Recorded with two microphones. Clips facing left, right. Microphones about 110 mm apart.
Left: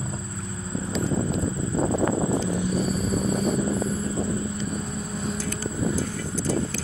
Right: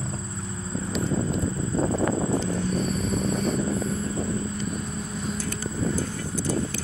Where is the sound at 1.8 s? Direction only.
20° left (ahead or behind).